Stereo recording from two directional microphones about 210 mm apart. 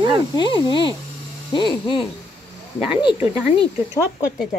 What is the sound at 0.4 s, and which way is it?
Speech, 20° left (ahead or behind).